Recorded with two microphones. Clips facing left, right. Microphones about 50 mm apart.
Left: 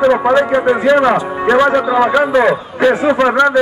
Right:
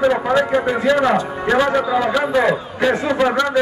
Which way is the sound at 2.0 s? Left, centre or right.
Left.